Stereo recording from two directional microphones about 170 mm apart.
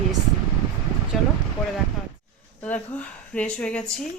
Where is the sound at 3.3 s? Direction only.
5° left (ahead or behind).